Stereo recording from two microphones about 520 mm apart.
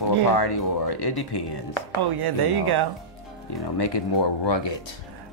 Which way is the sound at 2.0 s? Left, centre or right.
Right.